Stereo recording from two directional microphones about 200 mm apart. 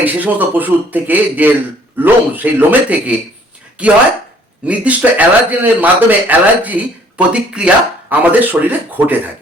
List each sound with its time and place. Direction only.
0.0 s speech: 10° right (ahead or behind)
4.6 s speech: 5° right (ahead or behind)